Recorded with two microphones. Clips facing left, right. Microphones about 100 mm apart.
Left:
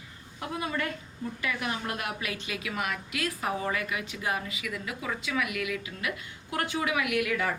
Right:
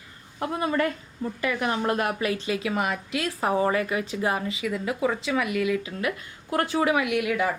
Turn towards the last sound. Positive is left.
turn(degrees=-20)  # may be behind; listen again after turning